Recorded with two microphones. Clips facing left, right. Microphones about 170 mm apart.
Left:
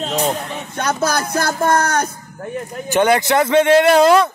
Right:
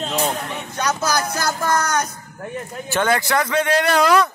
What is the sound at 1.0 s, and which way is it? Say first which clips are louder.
Music: left 3 dB; 55° left (ahead or behind).